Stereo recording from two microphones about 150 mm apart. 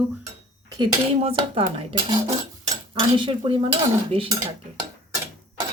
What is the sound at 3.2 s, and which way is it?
Speech, 35° right (ahead or behind).